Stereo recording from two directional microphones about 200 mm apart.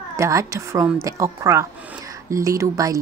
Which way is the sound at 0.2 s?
15° right (ahead or behind).